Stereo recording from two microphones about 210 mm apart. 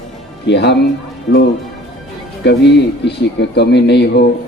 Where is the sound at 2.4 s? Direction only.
55° left (ahead or behind).